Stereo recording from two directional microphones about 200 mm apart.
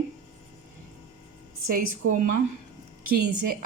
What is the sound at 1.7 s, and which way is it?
A woman's voice, 45° right (ahead or behind).